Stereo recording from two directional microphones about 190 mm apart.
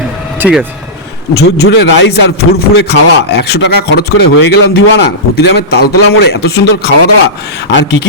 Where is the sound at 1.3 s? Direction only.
60° left (ahead or behind).